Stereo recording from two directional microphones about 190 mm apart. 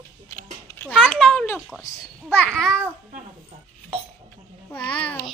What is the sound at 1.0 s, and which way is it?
Speech, 5° left (ahead or behind).